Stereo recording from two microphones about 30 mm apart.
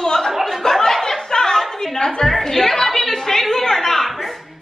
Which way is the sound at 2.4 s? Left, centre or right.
Centre.